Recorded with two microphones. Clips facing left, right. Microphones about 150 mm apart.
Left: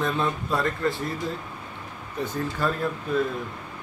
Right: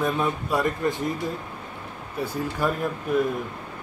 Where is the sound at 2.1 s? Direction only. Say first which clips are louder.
Right 1 dB; 10° right (ahead or behind).